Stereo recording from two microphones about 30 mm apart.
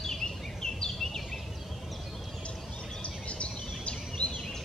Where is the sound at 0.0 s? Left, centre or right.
Centre.